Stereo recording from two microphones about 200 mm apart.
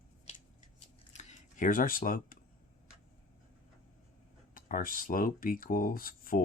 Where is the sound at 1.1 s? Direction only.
40° left (ahead or behind).